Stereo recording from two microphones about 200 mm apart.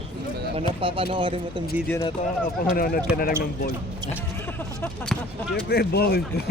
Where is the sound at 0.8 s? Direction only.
25° right (ahead or behind).